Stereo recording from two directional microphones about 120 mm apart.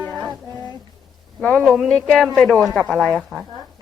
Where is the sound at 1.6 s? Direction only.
5° right (ahead or behind).